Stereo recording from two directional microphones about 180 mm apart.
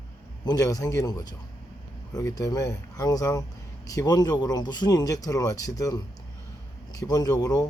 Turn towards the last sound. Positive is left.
turn(degrees=20)  # may be behind; listen again after turning